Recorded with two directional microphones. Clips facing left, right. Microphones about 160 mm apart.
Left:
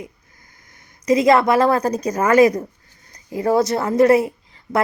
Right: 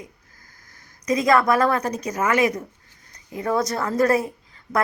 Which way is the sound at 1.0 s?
30° left (ahead or behind).